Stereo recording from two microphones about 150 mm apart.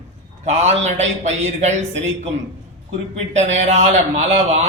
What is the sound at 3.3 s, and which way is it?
Speech, 50° right (ahead or behind).